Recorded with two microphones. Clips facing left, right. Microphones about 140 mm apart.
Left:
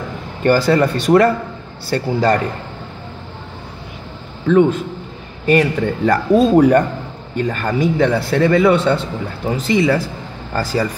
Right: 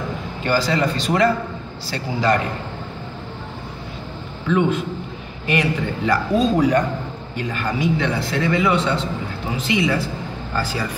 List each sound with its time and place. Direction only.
0.4 s a man's voice: 55° left (ahead or behind)
5.5 s a man's voice: 45° left (ahead or behind)